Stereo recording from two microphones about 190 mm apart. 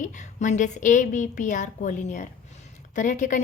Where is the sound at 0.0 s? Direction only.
40° left (ahead or behind).